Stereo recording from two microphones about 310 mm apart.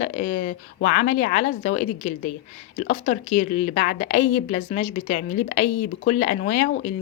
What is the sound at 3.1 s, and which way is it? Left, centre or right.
Speech, left.